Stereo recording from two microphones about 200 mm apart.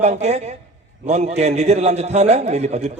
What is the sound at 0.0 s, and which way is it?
A man's voice, 35° right (ahead or behind).